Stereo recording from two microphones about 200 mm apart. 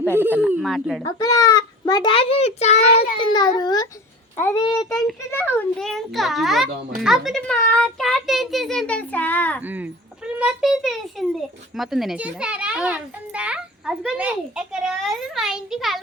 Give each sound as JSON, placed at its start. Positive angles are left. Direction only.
{"t": 0.1, "sound": "speech", "side_deg": -10}
{"t": 1.2, "sound": "a child's voice", "side_deg": 20}
{"t": 3.2, "sound": "a child's voice", "side_deg": 20}
{"t": 9.6, "sound": "a child's voice", "side_deg": -10}